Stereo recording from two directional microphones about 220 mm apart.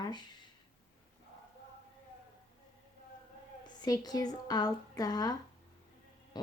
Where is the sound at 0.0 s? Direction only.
20° left (ahead or behind).